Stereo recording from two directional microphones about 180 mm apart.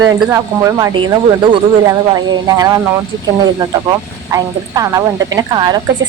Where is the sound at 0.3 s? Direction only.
15° right (ahead or behind).